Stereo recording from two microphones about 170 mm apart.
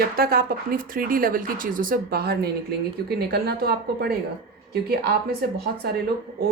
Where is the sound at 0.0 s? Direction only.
60° right (ahead or behind).